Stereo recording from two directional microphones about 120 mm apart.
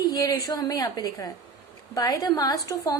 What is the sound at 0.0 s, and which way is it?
A woman's voice, 30° left (ahead or behind).